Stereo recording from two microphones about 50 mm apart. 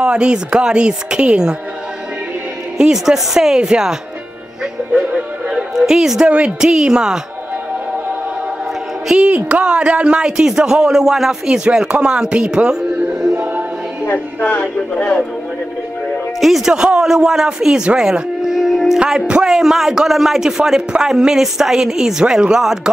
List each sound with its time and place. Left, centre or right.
0.0 s a woman's voice: centre
2.8 s a man's voice: centre
5.1 s music: centre
6.6 s a man's voice: centre
9.3 s a man's voice: right
14.4 s speech: left
16.3 s speech: centre
16.7 s a man's voice: centre
18.4 s a sound: centre
19.4 s a man's voice: centre